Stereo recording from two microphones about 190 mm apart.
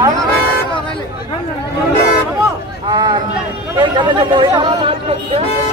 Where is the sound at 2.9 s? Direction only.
25° right (ahead or behind).